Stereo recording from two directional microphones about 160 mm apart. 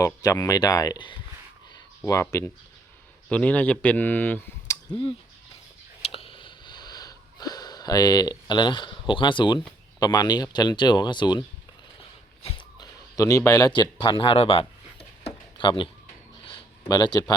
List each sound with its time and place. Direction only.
0.0 s speech: 20° left (ahead or behind)
2.3 s speech: 20° left (ahead or behind)
3.2 s speech: 10° left (ahead or behind)
6.1 s sniff: 35° left (ahead or behind)
10.0 s speech: 25° left (ahead or behind)
12.4 s a sound: 25° left (ahead or behind)